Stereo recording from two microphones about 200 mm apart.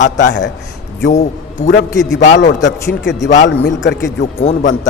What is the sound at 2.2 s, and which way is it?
Speech, 60° left (ahead or behind).